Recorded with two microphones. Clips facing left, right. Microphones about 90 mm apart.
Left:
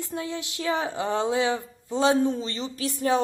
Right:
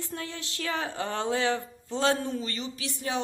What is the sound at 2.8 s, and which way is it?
Speech, 40° left (ahead or behind).